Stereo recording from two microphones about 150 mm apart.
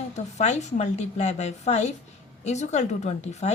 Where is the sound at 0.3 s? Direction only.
50° left (ahead or behind).